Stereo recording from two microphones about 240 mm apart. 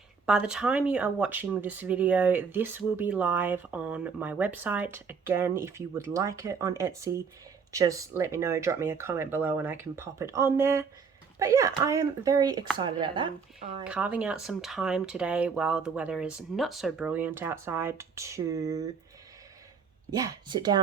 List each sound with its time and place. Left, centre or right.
0.3 s speech: centre; by 13.8 s right
13.8 s speech: centre
20.1 s speech: centre